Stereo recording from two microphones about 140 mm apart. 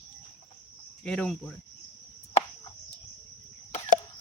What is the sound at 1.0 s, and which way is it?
Speech, 5° left (ahead or behind).